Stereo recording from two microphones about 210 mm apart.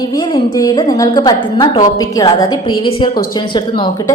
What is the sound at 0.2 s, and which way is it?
A woman's voice, 20° left (ahead or behind).